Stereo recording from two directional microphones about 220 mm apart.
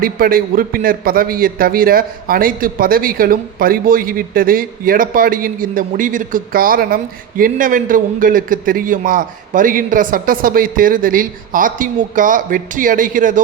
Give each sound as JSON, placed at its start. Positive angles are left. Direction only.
{"t": 0.0, "sound": "a man's voice", "side_deg": -40}